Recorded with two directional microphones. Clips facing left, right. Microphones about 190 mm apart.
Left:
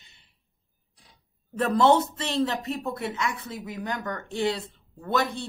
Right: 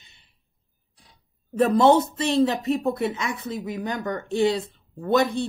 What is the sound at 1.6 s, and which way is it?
A man's voice, 15° right (ahead or behind).